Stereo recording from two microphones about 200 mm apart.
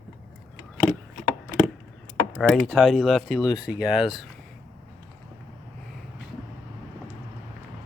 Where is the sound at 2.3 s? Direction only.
Centre (ahead or behind).